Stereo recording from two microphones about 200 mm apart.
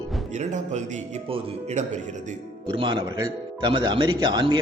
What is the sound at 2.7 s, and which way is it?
A man's voice, 25° right (ahead or behind).